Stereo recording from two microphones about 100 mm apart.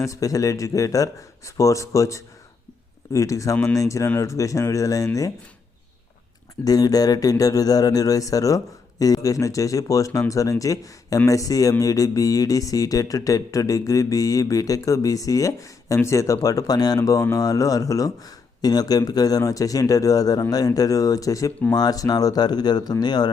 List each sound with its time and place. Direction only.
0.0 s speech: 35° left (ahead or behind)
6.7 s speech: 40° left (ahead or behind)